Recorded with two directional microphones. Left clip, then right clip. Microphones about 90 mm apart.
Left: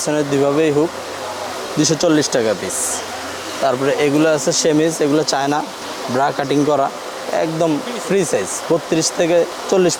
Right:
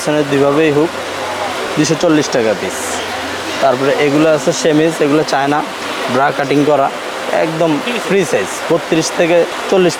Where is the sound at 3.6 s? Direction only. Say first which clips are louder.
Right 4 dB; 40° left (ahead or behind).